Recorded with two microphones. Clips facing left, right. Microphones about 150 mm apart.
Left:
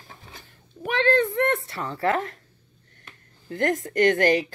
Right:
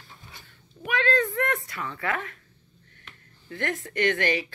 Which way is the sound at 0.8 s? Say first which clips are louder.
Left 4 dB; 30° left (ahead or behind).